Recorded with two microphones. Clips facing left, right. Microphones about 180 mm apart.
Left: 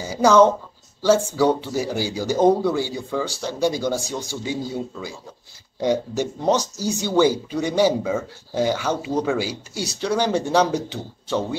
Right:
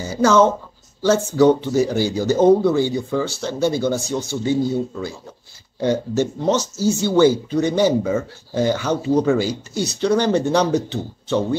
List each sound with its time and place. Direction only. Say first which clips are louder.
0.0 s speech: even; 10° left (ahead or behind)